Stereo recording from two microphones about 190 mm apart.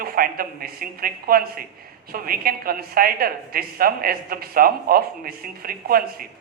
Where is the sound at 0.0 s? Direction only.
50° right (ahead or behind).